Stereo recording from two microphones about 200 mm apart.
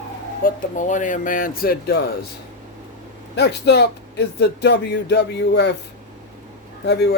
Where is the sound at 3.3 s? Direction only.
55° left (ahead or behind).